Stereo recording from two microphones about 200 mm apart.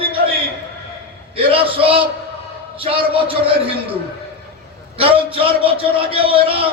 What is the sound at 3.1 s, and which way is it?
Speech, 25° right (ahead or behind).